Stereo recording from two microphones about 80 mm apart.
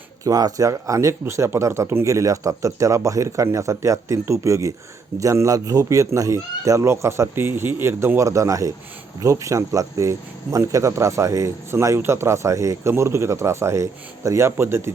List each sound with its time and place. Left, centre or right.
0.3 s speech: right
1.2 s speech: right
8.2 s speech: right